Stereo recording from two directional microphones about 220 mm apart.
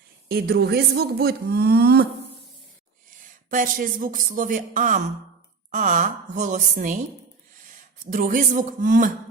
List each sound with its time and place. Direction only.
0.3 s speech: 45° right (ahead or behind)
3.5 s speech: 40° right (ahead or behind)